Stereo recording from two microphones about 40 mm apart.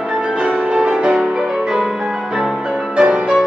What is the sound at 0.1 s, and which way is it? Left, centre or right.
Music, right.